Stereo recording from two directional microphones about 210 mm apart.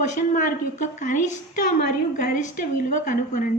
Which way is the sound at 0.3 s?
35° left (ahead or behind).